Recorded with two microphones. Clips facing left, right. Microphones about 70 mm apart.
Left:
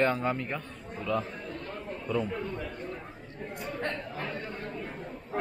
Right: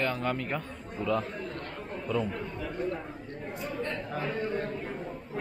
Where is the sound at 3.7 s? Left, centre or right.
Left.